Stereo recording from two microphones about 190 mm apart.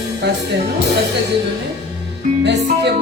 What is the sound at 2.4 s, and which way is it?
Music, 65° right (ahead or behind).